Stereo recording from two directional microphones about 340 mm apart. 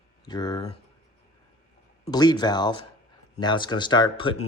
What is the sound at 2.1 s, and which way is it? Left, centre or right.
Speech, centre.